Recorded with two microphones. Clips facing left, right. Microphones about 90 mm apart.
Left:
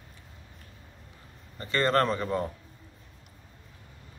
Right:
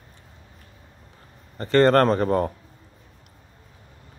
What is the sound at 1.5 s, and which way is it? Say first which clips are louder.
Speech: right 8 dB; 50° right (ahead or behind).